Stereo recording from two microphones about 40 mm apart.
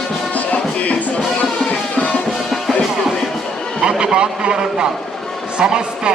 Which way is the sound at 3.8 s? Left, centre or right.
Centre.